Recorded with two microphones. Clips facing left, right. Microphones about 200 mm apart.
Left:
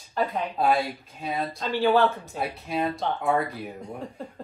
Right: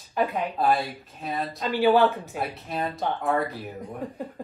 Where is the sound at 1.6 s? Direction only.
15° right (ahead or behind).